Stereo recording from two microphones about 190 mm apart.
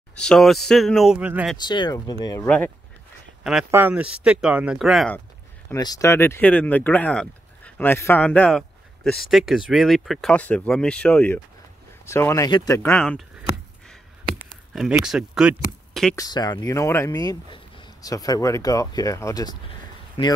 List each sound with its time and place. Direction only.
0.2 s speech: centre (ahead or behind)
1.6 s speech: 25° left (ahead or behind)
2.4 s speech: 5° left (ahead or behind)
3.4 s speech: 5° right (ahead or behind)
5.7 s speech: 20° left (ahead or behind)
14.4 s speech: 5° right (ahead or behind)
16.2 s speech: 20° left (ahead or behind)